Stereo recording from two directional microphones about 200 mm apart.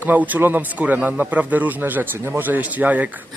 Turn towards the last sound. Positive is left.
turn(degrees=-10)  # may be behind; listen again after turning